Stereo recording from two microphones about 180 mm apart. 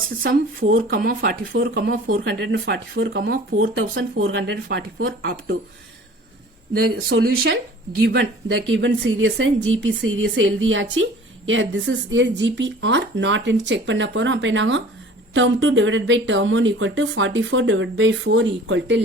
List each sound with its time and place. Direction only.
0.9 s speech: 55° right (ahead or behind)
2.4 s a woman's voice: 80° right
6.7 s a woman's voice: 65° right (ahead or behind); by 19.0 s 80° right